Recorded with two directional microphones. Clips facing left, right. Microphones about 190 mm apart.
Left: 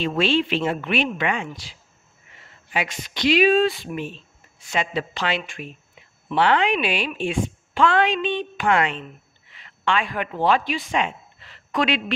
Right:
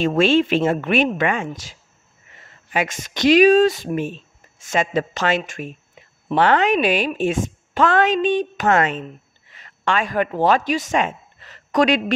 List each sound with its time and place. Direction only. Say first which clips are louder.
0.0 s a woman's voice: right 5 dB; 45° right (ahead or behind)